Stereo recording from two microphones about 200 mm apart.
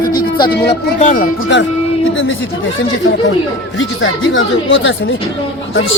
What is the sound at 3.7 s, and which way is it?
Speech, 75° left (ahead or behind).